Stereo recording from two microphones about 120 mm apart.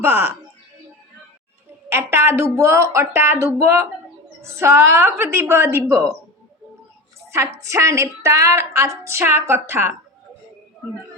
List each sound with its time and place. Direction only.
0.0 s a woman's voice: 20° right (ahead or behind)
1.9 s a woman's voice: 20° right (ahead or behind)
7.3 s a woman's voice: 25° right (ahead or behind)